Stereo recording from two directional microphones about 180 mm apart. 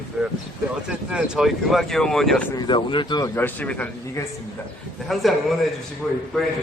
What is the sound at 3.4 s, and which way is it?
A man's voice, 10° left (ahead or behind).